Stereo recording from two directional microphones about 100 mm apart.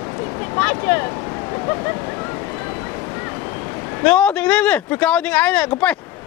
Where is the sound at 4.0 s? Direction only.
10° left (ahead or behind).